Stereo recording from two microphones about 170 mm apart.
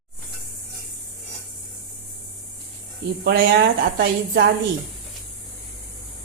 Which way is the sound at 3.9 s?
65° right (ahead or behind).